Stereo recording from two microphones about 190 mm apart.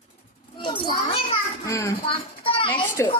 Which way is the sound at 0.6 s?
25° left (ahead or behind).